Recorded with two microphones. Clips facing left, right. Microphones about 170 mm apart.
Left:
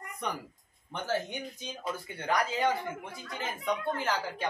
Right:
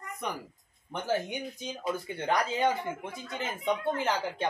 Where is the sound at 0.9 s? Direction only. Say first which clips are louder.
Right 2 dB; 15° right (ahead or behind).